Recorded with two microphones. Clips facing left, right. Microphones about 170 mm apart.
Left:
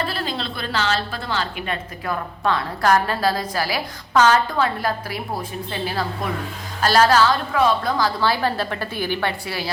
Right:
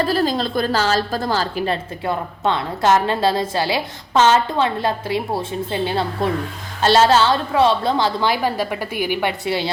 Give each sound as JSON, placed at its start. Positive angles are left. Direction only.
{"t": 0.0, "sound": "a woman's voice", "side_deg": -40}